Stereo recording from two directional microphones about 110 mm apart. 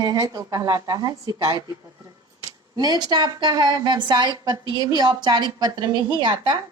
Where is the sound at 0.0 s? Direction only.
30° right (ahead or behind).